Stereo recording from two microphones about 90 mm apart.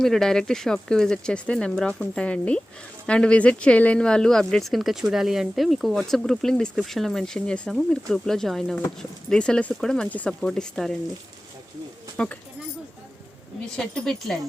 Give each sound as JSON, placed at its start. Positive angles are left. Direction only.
{"t": 0.0, "sound": "speech", "side_deg": 5}
{"t": 12.1, "sound": "speech", "side_deg": 10}
{"t": 13.7, "sound": "speech", "side_deg": 5}